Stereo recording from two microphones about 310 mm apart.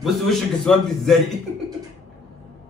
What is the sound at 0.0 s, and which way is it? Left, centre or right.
A man's voice, centre.